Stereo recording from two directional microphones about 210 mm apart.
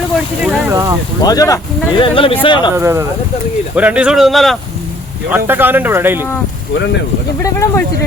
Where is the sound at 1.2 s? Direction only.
15° left (ahead or behind).